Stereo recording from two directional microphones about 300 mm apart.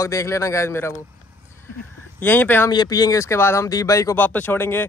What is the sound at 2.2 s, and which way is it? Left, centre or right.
Speech, centre.